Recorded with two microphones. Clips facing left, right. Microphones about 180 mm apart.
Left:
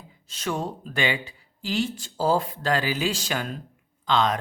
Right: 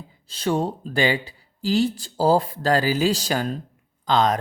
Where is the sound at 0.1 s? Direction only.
35° right (ahead or behind).